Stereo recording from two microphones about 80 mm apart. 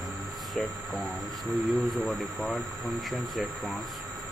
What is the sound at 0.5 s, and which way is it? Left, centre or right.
Speech, centre.